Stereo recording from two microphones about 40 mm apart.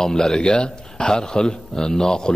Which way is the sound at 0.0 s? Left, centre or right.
Centre.